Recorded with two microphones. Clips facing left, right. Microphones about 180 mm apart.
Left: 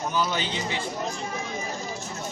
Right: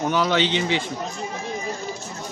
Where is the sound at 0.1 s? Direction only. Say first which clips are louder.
Right 7 dB; 85° right.